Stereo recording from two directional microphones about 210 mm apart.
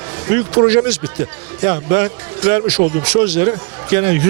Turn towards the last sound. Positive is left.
turn(degrees=-15)  # may be behind; listen again after turning